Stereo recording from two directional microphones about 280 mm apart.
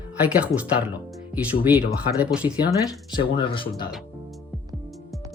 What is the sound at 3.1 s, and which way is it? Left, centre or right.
Speech, centre.